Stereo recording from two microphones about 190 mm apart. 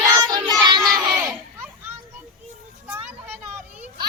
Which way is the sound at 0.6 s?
20° right (ahead or behind).